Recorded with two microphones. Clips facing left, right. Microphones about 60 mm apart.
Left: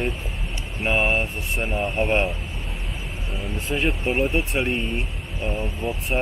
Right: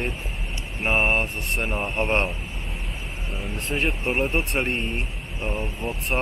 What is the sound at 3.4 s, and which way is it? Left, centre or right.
Speech, centre.